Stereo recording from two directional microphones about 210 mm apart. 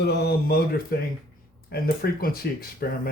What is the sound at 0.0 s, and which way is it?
Speech, 50° left (ahead or behind).